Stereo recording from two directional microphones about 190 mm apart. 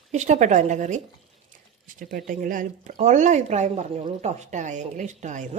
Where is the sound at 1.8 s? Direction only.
50° right (ahead or behind).